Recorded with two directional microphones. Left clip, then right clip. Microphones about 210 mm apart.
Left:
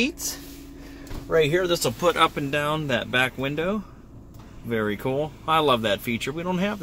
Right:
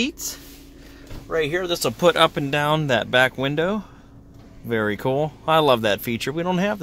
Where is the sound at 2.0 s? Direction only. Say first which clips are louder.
Right 5 dB; 50° right (ahead or behind).